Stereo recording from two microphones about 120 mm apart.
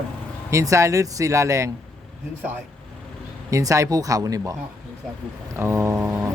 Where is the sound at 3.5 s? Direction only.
25° right (ahead or behind).